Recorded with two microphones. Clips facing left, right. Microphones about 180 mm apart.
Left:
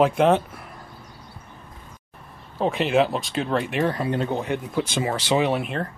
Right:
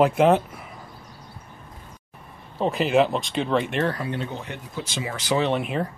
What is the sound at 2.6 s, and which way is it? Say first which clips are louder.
Speech: even; centre (ahead or behind).